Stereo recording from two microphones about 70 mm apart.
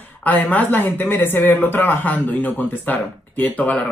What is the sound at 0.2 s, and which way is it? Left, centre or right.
Speech, left.